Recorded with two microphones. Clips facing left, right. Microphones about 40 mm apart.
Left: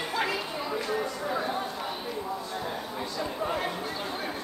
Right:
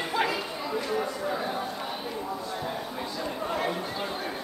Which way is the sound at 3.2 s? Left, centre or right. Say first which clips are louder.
Even; centre.